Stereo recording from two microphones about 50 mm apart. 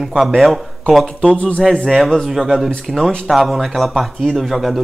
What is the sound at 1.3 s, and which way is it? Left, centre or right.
Speech, left.